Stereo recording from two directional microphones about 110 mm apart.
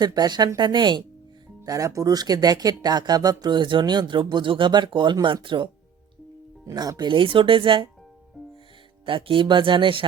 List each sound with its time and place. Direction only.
0.0 s speech: 40° right (ahead or behind)
1.6 s speech: 30° right (ahead or behind); by 5.6 s 50° right (ahead or behind)
6.7 s speech: 35° right (ahead or behind)
7.1 s speech: 50° right (ahead or behind)
9.0 s speech: 50° right (ahead or behind)